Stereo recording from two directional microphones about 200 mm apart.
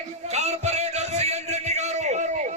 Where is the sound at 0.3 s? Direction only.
35° right (ahead or behind).